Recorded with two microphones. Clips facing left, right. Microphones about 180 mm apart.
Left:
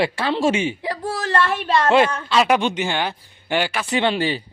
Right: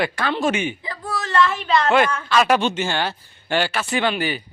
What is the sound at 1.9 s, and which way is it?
Speech, 25° left (ahead or behind).